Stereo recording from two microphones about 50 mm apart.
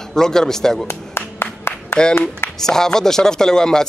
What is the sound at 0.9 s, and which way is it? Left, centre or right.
Clapping, left.